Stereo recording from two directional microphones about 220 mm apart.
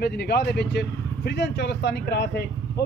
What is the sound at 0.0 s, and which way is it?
Speech, 50° left (ahead or behind).